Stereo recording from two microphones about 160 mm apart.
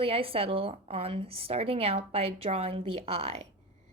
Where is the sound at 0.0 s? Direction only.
35° right (ahead or behind).